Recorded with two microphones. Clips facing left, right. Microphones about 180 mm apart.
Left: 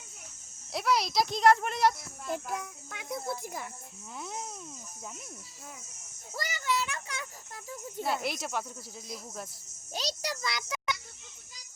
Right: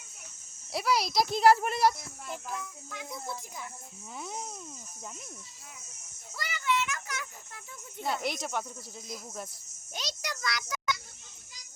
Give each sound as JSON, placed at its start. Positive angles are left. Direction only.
{"t": 0.7, "sound": "a child's voice", "side_deg": 0}
{"t": 2.5, "sound": "speech", "side_deg": 55}
{"t": 4.2, "sound": "a child's voice", "side_deg": 0}
{"t": 6.3, "sound": "a child's voice", "side_deg": 40}
{"t": 8.0, "sound": "a child's voice", "side_deg": 0}
{"t": 9.9, "sound": "a child's voice", "side_deg": 35}